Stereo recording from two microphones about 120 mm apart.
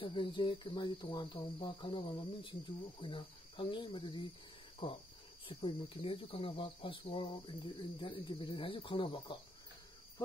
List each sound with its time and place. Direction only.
0.0 s speech: 40° left (ahead or behind)